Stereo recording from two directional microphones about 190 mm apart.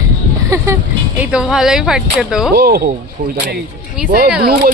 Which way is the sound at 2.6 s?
55° right (ahead or behind).